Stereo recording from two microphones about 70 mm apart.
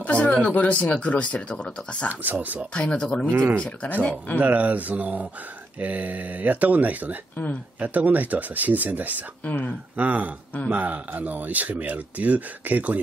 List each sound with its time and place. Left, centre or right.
0.0 s a sound: centre
0.5 s speech: left
2.0 s speech: right
2.7 s speech: centre
3.3 s speech: right
3.5 s speech: centre
4.4 s speech: right
9.4 s speech: left
9.9 s speech: right